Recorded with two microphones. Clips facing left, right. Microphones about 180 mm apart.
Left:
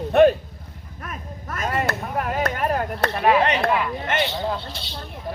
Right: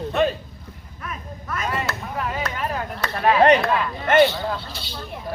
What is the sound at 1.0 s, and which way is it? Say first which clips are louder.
Speech: right 1 dB; 45° left (ahead or behind).